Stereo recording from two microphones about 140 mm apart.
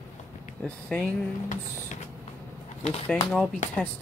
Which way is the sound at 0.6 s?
5° left (ahead or behind).